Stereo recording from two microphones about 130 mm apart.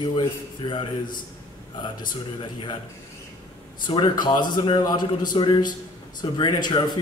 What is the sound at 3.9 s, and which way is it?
A man's voice, 35° left (ahead or behind).